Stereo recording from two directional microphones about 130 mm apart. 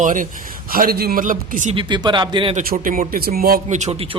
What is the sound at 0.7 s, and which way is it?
A man's voice, 90° right.